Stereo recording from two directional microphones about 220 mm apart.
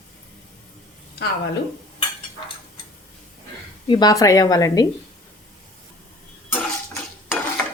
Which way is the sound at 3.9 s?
15° left (ahead or behind).